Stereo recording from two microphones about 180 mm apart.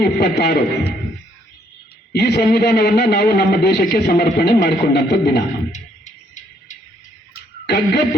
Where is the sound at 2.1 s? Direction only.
65° left (ahead or behind).